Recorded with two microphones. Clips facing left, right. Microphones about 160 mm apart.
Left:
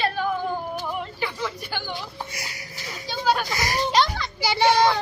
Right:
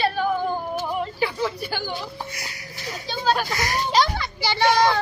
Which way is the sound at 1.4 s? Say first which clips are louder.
Right 4 dB; 40° right (ahead or behind).